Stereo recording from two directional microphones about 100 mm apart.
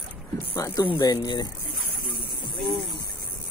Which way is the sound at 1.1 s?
40° left (ahead or behind).